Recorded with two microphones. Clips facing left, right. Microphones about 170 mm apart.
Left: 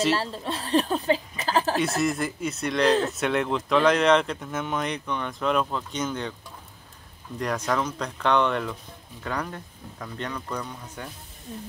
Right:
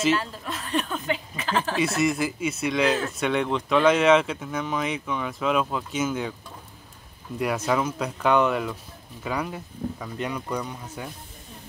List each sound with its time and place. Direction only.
0.1 s a sound: 30° left (ahead or behind)
1.8 s speech: centre (ahead or behind)
7.3 s speech: 5° right (ahead or behind)